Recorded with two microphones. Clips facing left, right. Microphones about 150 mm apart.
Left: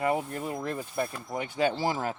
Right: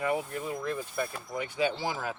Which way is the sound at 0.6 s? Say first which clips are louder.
Left 2 dB; 30° left (ahead or behind).